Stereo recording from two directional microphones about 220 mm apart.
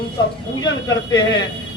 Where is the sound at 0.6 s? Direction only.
20° left (ahead or behind).